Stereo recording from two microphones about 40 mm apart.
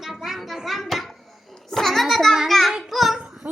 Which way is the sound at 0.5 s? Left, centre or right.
Centre.